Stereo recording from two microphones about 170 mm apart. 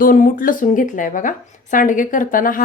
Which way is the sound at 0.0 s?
55° left (ahead or behind).